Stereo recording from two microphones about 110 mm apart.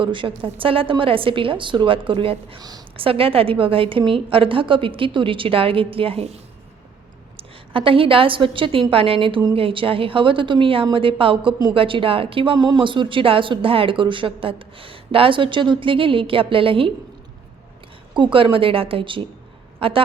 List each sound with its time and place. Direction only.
0.0 s speech: 50° right (ahead or behind)
2.6 s a woman's voice: 35° right (ahead or behind)
3.0 s a woman's voice: 55° right (ahead or behind)
7.3 s a woman's voice: 55° right (ahead or behind)
18.1 s a woman's voice: 50° right (ahead or behind)